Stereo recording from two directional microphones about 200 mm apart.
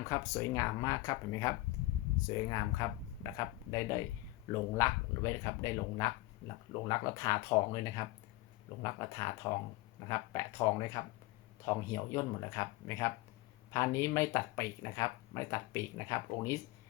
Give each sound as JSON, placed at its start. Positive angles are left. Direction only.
{"t": 0.1, "sound": "speech", "side_deg": 15}